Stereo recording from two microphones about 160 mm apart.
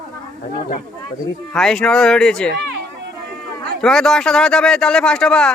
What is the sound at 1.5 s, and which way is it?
Speech, 5° left (ahead or behind).